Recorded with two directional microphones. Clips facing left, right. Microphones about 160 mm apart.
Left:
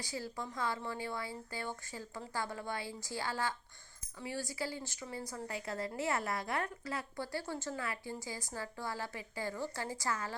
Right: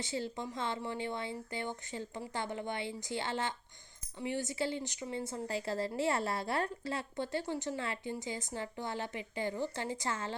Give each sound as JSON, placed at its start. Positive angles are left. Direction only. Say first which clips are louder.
{"t": 0.0, "sound": "speech", "louder": "right 4 dB", "side_deg": -25}